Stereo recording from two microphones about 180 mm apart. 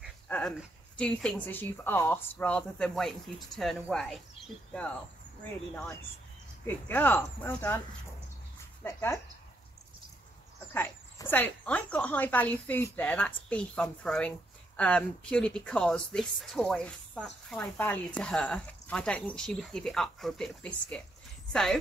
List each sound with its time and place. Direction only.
0.3 s speech: 5° left (ahead or behind)
5.4 s speech: 10° left (ahead or behind)
8.8 s speech: 15° left (ahead or behind)
10.7 s speech: 10° left (ahead or behind)